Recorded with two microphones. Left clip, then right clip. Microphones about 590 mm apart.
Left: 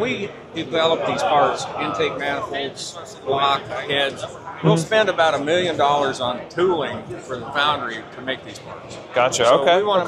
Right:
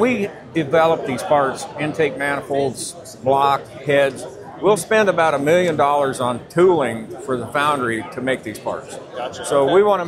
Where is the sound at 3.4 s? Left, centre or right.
Right.